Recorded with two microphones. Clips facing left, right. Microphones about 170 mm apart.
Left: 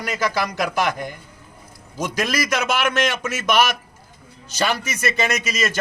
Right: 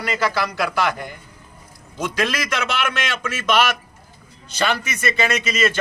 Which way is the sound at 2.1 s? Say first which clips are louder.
Left 1 dB; 40° left (ahead or behind).